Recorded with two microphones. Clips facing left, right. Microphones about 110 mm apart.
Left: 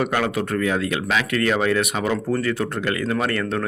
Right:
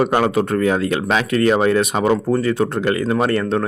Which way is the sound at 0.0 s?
30° right (ahead or behind).